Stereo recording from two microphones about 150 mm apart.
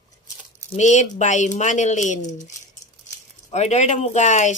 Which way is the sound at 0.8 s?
50° left (ahead or behind).